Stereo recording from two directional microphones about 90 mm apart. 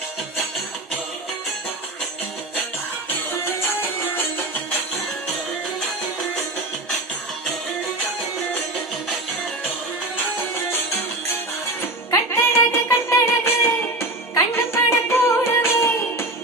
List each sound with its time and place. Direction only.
3.4 s music: 25° left (ahead or behind)
12.3 s music: 25° left (ahead or behind)